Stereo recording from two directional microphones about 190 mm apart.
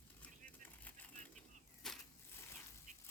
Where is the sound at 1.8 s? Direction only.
Centre (ahead or behind).